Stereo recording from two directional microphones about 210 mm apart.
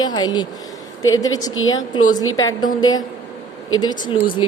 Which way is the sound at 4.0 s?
25° left (ahead or behind).